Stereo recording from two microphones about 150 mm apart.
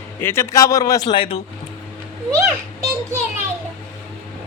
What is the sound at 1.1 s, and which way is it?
Speech, 35° left (ahead or behind).